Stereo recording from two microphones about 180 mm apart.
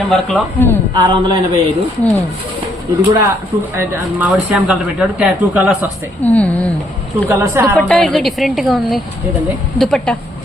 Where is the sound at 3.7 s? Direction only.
10° right (ahead or behind).